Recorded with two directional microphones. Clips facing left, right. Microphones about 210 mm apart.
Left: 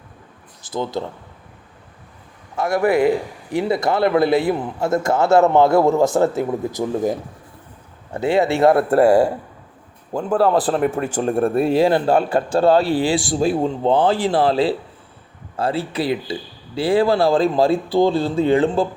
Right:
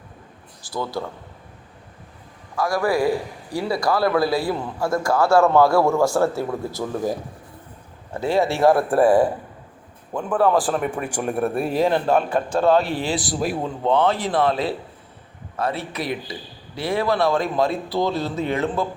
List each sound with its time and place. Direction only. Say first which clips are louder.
0.6 s speech: left 3 dB; 20° left (ahead or behind)
2.6 s a man's voice: left 4 dB; 25° left (ahead or behind)
8.2 s a man's voice: left 3 dB; 20° left (ahead or behind)